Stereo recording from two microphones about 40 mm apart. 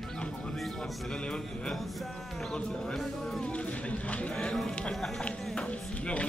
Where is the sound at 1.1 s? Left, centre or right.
Left.